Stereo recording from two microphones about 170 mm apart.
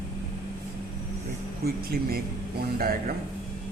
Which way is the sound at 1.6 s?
65° right (ahead or behind).